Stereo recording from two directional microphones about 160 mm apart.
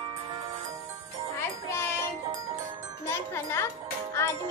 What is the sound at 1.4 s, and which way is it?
Music, 15° left (ahead or behind).